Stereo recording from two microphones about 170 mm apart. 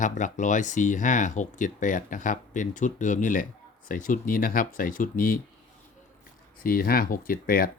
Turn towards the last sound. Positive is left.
turn(degrees=55)  # may be behind; listen again after turning